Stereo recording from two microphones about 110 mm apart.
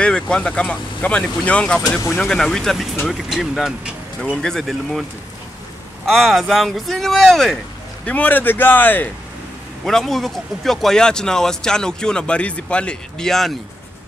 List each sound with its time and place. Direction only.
0.0 s speech: 10° left (ahead or behind)
4.2 s speech: 5° left (ahead or behind)
6.0 s speech: centre (ahead or behind); by 9.1 s 15° left (ahead or behind)
9.8 s speech: 5° left (ahead or behind)